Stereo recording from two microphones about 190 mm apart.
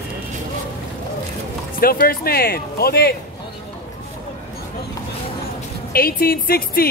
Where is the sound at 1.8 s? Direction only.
50° left (ahead or behind).